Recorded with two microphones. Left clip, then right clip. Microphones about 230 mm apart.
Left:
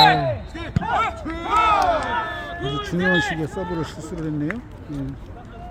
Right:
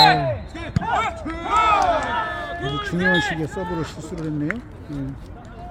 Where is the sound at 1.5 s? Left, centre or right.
Centre.